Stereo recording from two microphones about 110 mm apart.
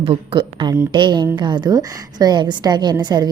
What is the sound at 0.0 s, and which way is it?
A woman's voice, 50° right (ahead or behind).